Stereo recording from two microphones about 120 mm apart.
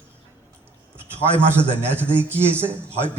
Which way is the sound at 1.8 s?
20° right (ahead or behind).